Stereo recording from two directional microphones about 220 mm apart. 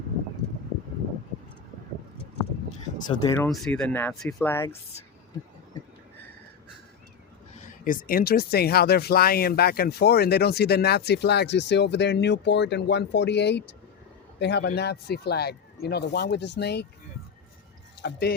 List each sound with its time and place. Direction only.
3.2 s speech: 10° left (ahead or behind)
7.5 s speech: 35° left (ahead or behind)
18.0 s speech: 45° left (ahead or behind)